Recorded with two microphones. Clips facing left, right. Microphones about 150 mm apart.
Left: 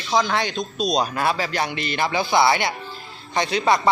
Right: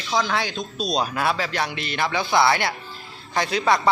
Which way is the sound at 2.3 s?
25° left (ahead or behind).